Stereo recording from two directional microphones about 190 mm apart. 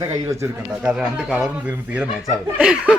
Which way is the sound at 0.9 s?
Centre (ahead or behind).